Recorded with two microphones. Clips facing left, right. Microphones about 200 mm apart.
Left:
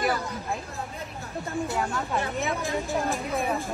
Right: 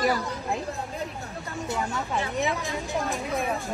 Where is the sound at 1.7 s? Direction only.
Centre (ahead or behind).